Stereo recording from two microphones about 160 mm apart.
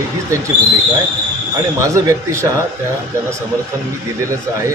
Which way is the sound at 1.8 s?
20° right (ahead or behind).